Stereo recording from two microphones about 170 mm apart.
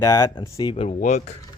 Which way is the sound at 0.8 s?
45° left (ahead or behind).